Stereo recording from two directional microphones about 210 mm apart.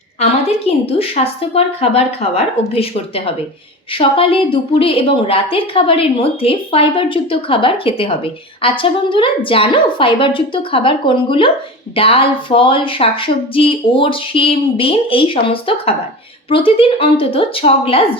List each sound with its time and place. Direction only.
0.2 s a woman's voice: 30° left (ahead or behind)
3.9 s a woman's voice: 25° left (ahead or behind)